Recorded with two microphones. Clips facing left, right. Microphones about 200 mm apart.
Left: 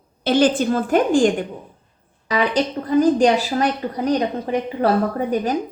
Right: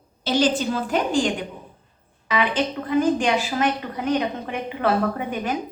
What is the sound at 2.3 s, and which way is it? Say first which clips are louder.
A woman's voice: left 3 dB; 40° left (ahead or behind).